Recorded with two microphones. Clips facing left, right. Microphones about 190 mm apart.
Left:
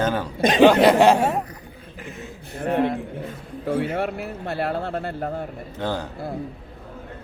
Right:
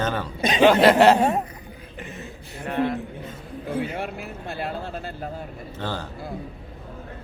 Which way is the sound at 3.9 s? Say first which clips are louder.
Left 5 dB; 65° left (ahead or behind).